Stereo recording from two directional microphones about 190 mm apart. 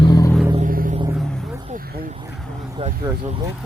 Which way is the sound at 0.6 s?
45° right (ahead or behind).